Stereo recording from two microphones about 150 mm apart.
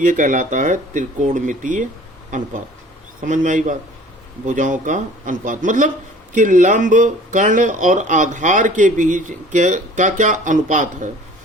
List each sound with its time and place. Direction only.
0.0 s speech: 60° right (ahead or behind)